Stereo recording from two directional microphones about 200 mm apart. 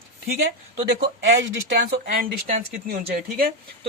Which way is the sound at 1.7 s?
45° right (ahead or behind).